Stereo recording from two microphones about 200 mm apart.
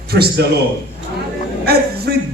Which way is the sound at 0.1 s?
50° right (ahead or behind).